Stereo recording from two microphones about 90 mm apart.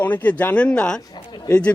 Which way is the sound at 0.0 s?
20° left (ahead or behind).